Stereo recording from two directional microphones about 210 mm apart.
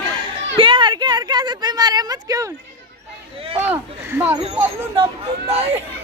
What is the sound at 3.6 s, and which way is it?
Speech, 10° right (ahead or behind).